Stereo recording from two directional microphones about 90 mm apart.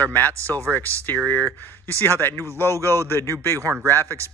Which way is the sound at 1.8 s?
25° left (ahead or behind).